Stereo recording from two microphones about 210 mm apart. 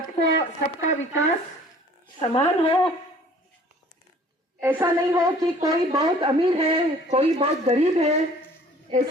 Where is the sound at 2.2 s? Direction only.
25° left (ahead or behind).